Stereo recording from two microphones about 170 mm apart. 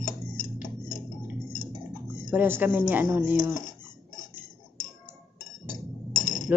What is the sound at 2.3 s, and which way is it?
A woman's voice, 10° right (ahead or behind).